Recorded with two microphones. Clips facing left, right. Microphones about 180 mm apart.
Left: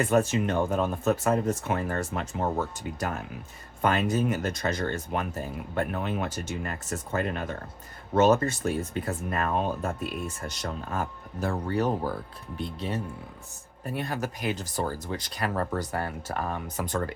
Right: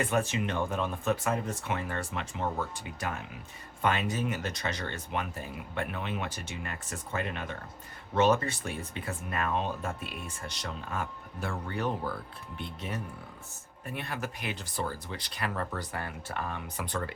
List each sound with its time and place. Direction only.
0.0 s speech: 45° left (ahead or behind)